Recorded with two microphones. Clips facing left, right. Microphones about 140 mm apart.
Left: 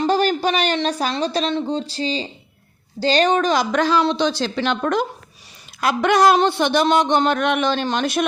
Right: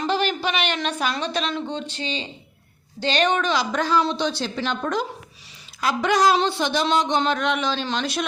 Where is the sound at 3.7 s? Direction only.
85° left.